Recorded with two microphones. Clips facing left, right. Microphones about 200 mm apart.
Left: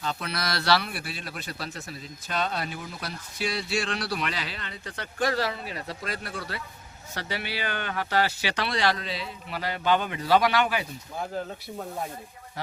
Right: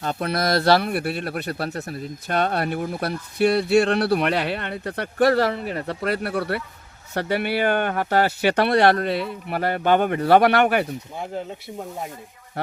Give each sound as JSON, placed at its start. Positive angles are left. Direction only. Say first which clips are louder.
{"t": 0.0, "sound": "speech", "louder": "right 8 dB", "side_deg": -50}